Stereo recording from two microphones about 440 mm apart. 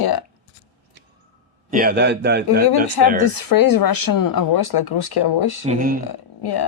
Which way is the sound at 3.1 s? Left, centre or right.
Left.